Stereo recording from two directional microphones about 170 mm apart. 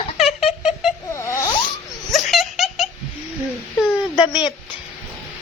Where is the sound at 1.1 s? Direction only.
15° left (ahead or behind).